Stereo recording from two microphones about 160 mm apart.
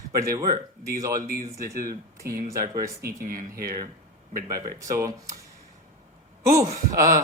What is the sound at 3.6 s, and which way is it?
A man's voice, 20° right (ahead or behind).